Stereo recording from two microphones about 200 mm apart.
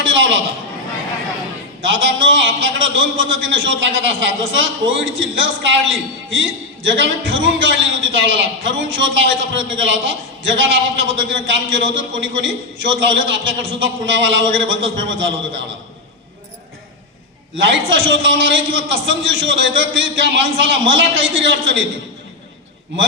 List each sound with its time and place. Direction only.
0.0 s a man's voice: 65° right (ahead or behind)
1.8 s a man's voice: 65° right (ahead or behind)
17.6 s a man's voice: 65° right (ahead or behind)